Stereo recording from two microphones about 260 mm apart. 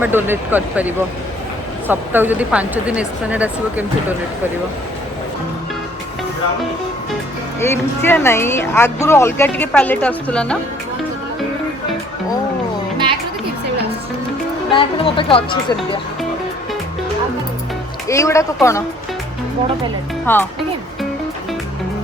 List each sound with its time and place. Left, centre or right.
0.0 s speech: centre
7.6 s speech: centre
14.7 s speech: centre
18.1 s speech: centre
20.2 s speech: centre